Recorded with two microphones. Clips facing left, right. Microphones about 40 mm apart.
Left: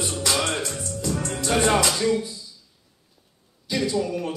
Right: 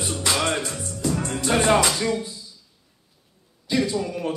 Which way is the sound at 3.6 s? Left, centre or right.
Centre.